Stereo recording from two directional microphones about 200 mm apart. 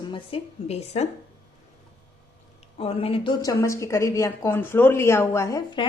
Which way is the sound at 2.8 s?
30° left (ahead or behind).